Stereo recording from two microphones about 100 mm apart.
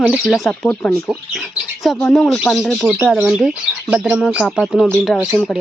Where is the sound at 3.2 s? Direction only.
5° right (ahead or behind).